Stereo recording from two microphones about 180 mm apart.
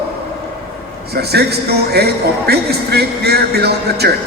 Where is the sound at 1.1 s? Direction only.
65° right (ahead or behind).